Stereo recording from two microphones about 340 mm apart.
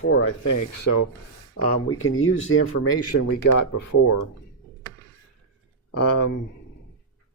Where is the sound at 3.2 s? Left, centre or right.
Left.